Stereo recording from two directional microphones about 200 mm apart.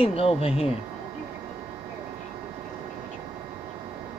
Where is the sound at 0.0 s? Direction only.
30° left (ahead or behind).